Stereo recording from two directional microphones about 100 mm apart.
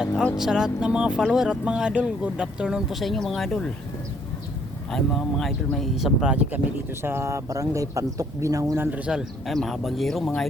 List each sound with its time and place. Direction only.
0.3 s speech: 5° right (ahead or behind)
4.9 s speech: 5° left (ahead or behind)
6.3 s speech: 15° right (ahead or behind)
7.0 s speech: 25° right (ahead or behind)
8.8 s speech: 15° right (ahead or behind); by 10.4 s 5° left (ahead or behind)